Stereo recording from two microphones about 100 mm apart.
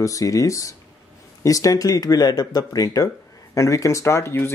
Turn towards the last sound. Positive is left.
turn(degrees=25)  # may be behind; listen again after turning